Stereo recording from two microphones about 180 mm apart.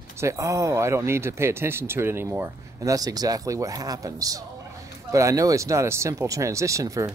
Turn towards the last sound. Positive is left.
turn(degrees=-20)  # may be behind; listen again after turning